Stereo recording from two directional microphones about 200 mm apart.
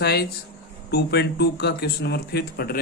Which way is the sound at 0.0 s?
55° left (ahead or behind).